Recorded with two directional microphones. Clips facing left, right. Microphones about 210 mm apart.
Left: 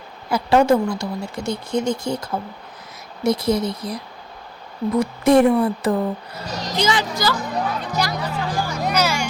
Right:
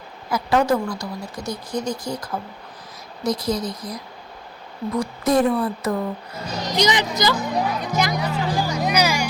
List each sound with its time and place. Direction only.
0.3 s speech: 30° left (ahead or behind)
6.7 s speech: 20° right (ahead or behind)